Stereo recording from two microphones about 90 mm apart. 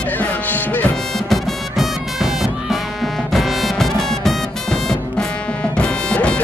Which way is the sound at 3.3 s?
Centre (ahead or behind).